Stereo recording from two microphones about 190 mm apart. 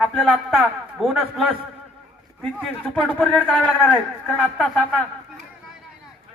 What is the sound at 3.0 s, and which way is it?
A man's voice, 5° left (ahead or behind).